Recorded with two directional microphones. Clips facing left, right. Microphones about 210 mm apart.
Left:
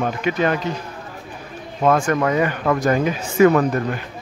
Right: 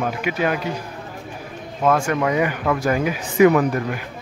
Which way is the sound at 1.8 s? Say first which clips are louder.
Left 2 dB; 5° right (ahead or behind).